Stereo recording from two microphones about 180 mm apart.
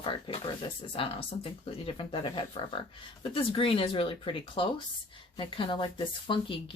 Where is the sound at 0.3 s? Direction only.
30° left (ahead or behind).